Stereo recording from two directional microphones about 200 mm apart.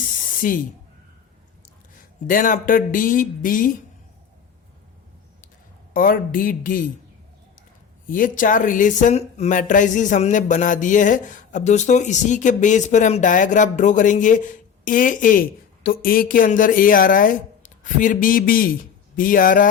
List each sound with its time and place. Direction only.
0.2 s spray: 45° left (ahead or behind)
2.2 s speech: 40° left (ahead or behind)
5.9 s speech: 45° left (ahead or behind)
8.0 s speech: 45° left (ahead or behind)